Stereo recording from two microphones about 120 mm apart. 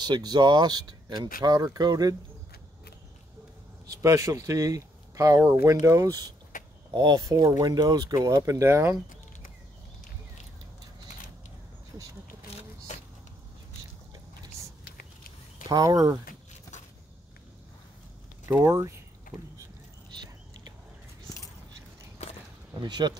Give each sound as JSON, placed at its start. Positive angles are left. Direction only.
{"t": 0.0, "sound": "speech", "side_deg": -35}
{"t": 3.8, "sound": "speech", "side_deg": -30}
{"t": 15.6, "sound": "speech", "side_deg": -30}
{"t": 18.6, "sound": "speech", "side_deg": -25}
{"t": 22.8, "sound": "speech", "side_deg": -40}